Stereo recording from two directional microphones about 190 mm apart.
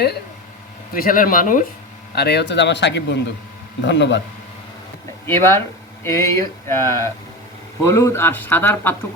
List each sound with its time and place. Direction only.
0.9 s speech: 45° left (ahead or behind)
2.1 s speech: 60° left (ahead or behind)
5.2 s speech: 15° left (ahead or behind)